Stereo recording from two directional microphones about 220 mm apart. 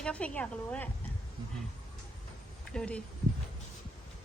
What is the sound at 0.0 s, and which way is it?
Speech, 5° left (ahead or behind).